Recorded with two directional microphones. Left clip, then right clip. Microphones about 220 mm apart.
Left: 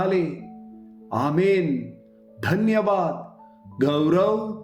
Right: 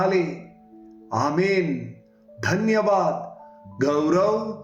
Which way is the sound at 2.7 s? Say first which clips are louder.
Right 2 dB; 45° left (ahead or behind).